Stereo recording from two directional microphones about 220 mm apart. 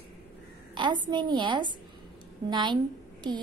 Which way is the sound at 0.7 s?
20° right (ahead or behind).